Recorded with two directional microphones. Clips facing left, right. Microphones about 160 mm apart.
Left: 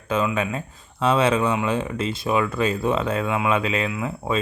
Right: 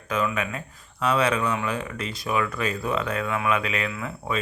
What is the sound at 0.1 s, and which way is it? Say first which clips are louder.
Speech: left 3 dB; 30° left (ahead or behind).